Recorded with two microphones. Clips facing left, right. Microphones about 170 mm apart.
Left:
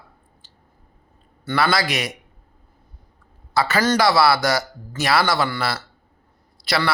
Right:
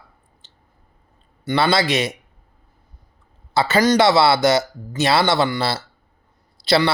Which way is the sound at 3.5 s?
25° right (ahead or behind).